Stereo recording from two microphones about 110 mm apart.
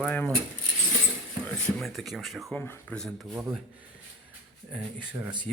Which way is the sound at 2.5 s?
15° left (ahead or behind).